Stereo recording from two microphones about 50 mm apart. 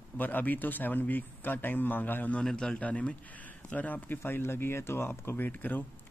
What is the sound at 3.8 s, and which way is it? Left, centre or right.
Speech, left.